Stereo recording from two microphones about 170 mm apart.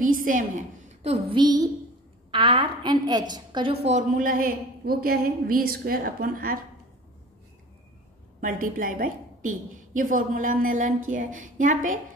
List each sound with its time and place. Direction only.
0.0 s a woman's voice: 50° right (ahead or behind)
1.3 s a woman's voice: 25° right (ahead or behind); by 6.6 s 55° right (ahead or behind)
8.4 s a woman's voice: 50° right (ahead or behind)